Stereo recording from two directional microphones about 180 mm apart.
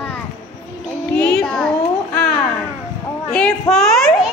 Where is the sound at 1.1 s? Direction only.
5° left (ahead or behind).